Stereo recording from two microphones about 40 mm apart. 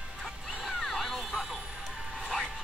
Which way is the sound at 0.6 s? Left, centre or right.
Centre.